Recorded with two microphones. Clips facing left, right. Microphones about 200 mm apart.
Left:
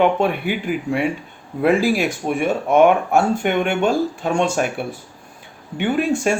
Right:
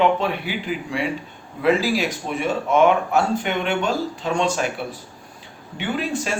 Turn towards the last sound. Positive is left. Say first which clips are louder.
# left 6 dB
turn(degrees=50)  # may be behind; listen again after turning